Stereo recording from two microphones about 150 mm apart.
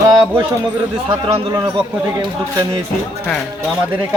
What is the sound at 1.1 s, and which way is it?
Speech, 30° right (ahead or behind).